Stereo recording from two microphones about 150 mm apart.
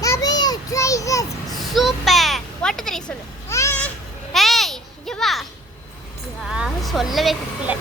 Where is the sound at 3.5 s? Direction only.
20° left (ahead or behind).